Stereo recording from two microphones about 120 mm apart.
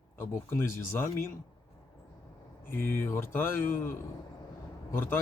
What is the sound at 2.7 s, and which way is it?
Speech, 15° left (ahead or behind).